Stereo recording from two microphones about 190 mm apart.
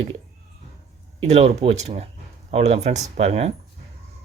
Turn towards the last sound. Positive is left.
turn(degrees=-35)  # may be behind; listen again after turning